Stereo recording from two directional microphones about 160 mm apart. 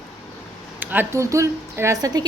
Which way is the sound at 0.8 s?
10° right (ahead or behind).